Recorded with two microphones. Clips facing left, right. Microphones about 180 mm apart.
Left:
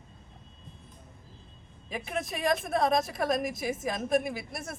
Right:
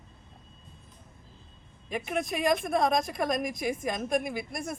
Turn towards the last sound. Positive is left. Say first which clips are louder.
# right 2 dB
turn(degrees=5)  # may be behind; listen again after turning